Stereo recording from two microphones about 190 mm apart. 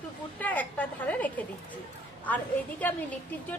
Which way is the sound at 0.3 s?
10° left (ahead or behind).